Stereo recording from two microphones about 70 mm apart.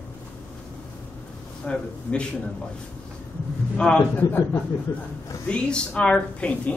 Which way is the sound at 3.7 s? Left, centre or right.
Centre.